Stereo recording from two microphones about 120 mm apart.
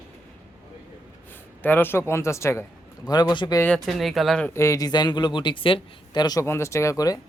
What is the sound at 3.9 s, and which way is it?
Speech, centre (ahead or behind).